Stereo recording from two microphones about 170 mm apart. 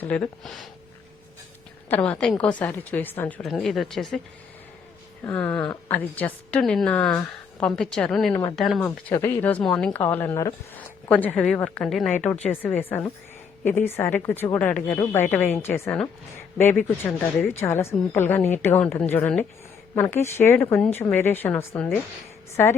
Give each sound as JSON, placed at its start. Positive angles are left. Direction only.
{"t": 0.0, "sound": "speech", "side_deg": 5}
{"t": 1.9, "sound": "speech", "side_deg": 10}
{"t": 5.2, "sound": "speech", "side_deg": 10}
{"t": 8.3, "sound": "speech", "side_deg": 25}
{"t": 8.5, "sound": "speech", "side_deg": 0}
{"t": 9.1, "sound": "speech", "side_deg": 15}